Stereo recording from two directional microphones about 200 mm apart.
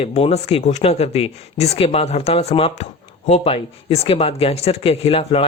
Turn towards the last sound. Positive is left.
turn(degrees=30)  # may be behind; listen again after turning